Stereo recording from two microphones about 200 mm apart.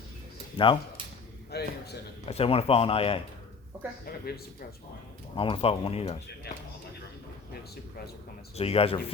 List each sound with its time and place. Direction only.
0.5 s speech: 25° left (ahead or behind)
1.5 s a man's voice: 55° left (ahead or behind)
2.2 s speech: 30° left (ahead or behind)
5.4 s speech: 25° left (ahead or behind)
8.5 s speech: 30° left (ahead or behind)